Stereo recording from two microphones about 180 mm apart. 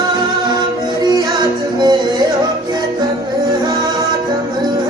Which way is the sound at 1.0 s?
20° right (ahead or behind).